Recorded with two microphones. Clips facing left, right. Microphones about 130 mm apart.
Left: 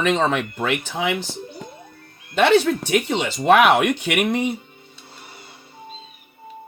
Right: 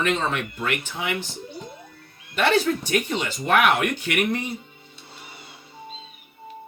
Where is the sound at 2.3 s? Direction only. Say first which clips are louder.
Left 5 dB; 75° left (ahead or behind).